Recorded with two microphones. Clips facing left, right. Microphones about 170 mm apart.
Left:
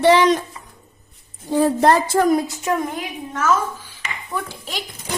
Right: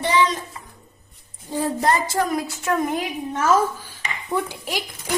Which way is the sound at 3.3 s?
35° right (ahead or behind).